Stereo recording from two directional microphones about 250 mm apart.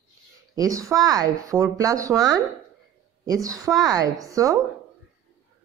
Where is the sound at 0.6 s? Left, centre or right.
Centre.